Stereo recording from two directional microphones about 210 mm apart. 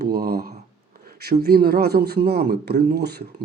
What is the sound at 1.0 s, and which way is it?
Speech, 50° right (ahead or behind).